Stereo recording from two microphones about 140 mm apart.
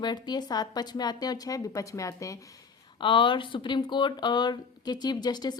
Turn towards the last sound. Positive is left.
turn(degrees=30)  # may be behind; listen again after turning